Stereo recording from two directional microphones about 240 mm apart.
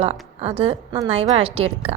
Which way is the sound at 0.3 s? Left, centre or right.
Right.